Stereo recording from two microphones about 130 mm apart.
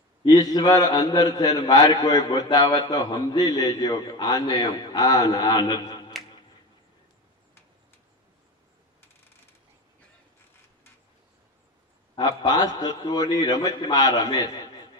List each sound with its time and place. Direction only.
0.3 s a man's voice: 30° left (ahead or behind)
12.5 s a man's voice: 30° left (ahead or behind)